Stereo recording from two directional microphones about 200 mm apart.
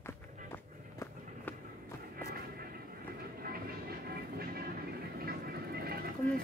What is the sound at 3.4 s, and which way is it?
Music, 50° right (ahead or behind).